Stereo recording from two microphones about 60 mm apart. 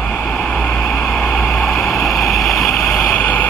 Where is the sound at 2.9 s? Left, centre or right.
Left.